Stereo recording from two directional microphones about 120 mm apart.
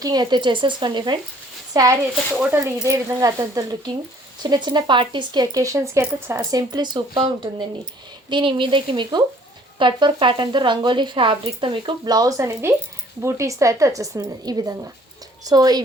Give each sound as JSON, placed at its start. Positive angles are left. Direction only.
{"t": 0.0, "sound": "speech", "side_deg": -35}
{"t": 1.7, "sound": "a woman's voice", "side_deg": -30}
{"t": 6.5, "sound": "a woman's voice", "side_deg": -35}